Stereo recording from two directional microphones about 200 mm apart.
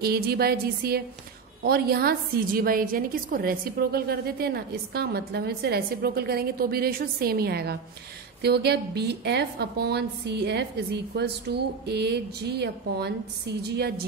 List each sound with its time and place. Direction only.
0.0 s a woman's voice: 50° right (ahead or behind)